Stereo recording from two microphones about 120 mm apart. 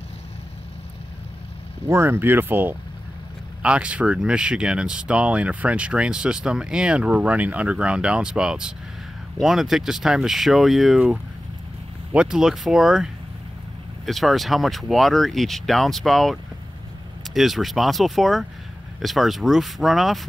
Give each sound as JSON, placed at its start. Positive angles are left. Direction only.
{"t": 1.9, "sound": "speech", "side_deg": -20}
{"t": 12.1, "sound": "speech", "side_deg": -5}